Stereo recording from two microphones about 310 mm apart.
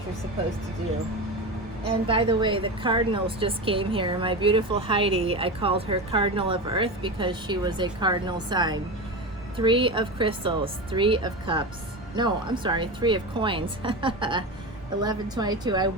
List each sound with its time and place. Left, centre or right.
2.0 s a woman's voice: centre